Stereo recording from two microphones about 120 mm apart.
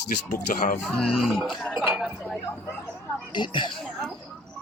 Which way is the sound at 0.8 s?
5° left (ahead or behind).